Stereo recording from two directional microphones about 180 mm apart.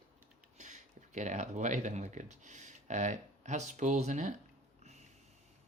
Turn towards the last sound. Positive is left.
turn(degrees=-40)  # may be behind; listen again after turning